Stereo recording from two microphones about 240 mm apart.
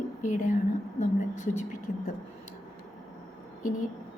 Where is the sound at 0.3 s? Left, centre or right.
Left.